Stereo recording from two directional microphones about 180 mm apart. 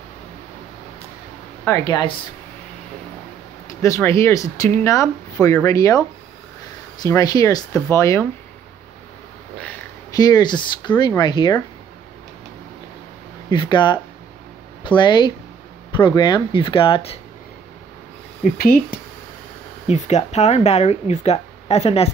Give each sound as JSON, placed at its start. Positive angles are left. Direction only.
{"t": 1.7, "sound": "speech", "side_deg": 25}
{"t": 3.6, "sound": "speech", "side_deg": 15}
{"t": 10.1, "sound": "speech", "side_deg": 20}
{"t": 13.5, "sound": "speech", "side_deg": 25}
{"t": 18.4, "sound": "speech", "side_deg": 55}
{"t": 19.9, "sound": "speech", "side_deg": 40}